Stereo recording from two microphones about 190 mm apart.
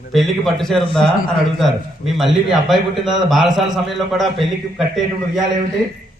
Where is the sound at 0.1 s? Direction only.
Centre (ahead or behind).